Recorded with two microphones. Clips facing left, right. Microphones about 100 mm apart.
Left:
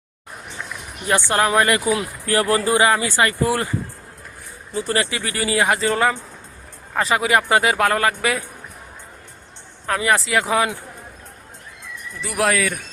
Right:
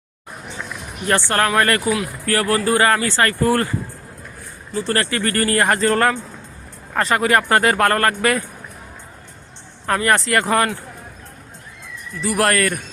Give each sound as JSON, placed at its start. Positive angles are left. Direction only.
{"t": 1.3, "sound": "speech", "side_deg": 15}
{"t": 4.7, "sound": "a man's voice", "side_deg": 10}
{"t": 9.8, "sound": "a man's voice", "side_deg": 0}
{"t": 12.2, "sound": "a man's voice", "side_deg": 0}